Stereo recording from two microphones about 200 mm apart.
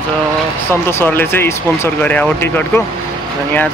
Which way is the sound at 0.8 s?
10° left (ahead or behind).